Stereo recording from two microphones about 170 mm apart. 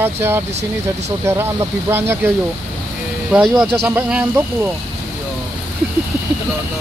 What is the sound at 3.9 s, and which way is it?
Speech, 10° right (ahead or behind).